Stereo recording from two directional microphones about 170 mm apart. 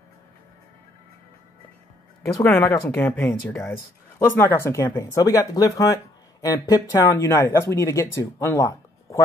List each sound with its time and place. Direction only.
2.4 s speech: 15° left (ahead or behind)